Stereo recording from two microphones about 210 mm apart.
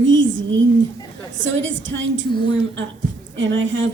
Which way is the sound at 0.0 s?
65° right (ahead or behind).